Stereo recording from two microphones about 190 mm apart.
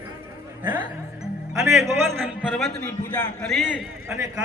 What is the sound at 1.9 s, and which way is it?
A man's voice, centre (ahead or behind).